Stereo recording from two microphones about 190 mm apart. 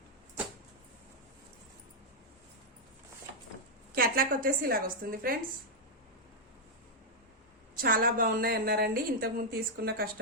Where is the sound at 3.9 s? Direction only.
50° right (ahead or behind).